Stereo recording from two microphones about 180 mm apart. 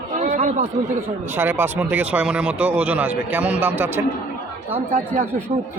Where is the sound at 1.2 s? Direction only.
10° right (ahead or behind).